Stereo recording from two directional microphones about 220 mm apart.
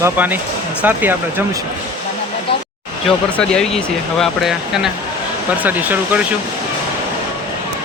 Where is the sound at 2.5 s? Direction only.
25° left (ahead or behind).